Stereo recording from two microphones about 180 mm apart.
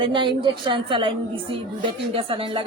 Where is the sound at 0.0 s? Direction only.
25° right (ahead or behind).